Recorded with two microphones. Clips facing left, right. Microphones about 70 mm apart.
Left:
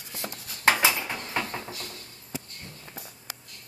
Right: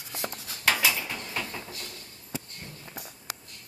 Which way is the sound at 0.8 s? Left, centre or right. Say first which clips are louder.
Left 2 dB; left.